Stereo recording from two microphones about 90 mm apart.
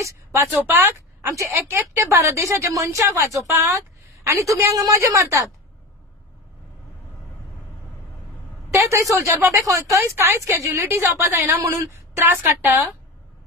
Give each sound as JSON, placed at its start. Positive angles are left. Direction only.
{"t": 0.0, "sound": "a woman's voice", "side_deg": -35}
{"t": 3.4, "sound": "a woman's voice", "side_deg": -25}
{"t": 8.6, "sound": "a man's voice", "side_deg": -35}
{"t": 12.3, "sound": "a woman's voice", "side_deg": -25}